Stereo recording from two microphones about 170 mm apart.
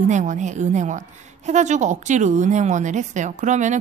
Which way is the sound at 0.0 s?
45° right (ahead or behind).